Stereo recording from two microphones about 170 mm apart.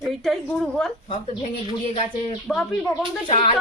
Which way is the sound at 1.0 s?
35° left (ahead or behind).